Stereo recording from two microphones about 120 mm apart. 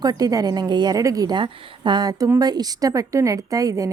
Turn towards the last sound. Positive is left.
turn(degrees=-30)  # may be behind; listen again after turning